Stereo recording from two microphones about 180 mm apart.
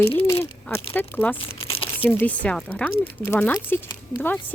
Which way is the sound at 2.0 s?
10° left (ahead or behind).